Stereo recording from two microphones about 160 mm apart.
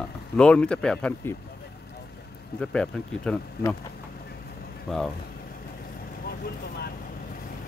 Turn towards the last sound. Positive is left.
turn(degrees=75)  # may be behind; listen again after turning